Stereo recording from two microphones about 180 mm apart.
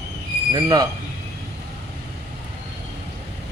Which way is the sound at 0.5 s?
20° right (ahead or behind).